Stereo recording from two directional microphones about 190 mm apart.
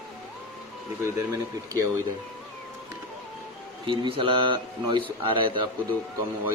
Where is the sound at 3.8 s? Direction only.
25° right (ahead or behind).